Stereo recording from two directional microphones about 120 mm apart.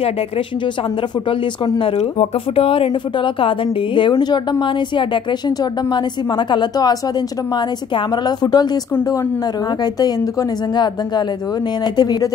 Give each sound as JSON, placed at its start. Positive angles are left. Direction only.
{"t": 1.8, "sound": "a woman's voice", "side_deg": 55}
{"t": 6.3, "sound": "a woman's voice", "side_deg": 40}
{"t": 12.0, "sound": "a woman's voice", "side_deg": 35}